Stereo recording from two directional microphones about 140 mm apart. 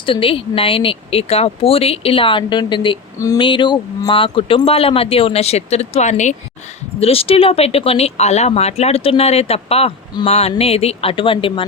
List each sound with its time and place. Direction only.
0.0 s speech: 40° left (ahead or behind)
3.2 s speech: 25° left (ahead or behind)
3.4 s speech: 35° left (ahead or behind); by 6.3 s 55° left (ahead or behind)
7.0 s speech: 45° left (ahead or behind)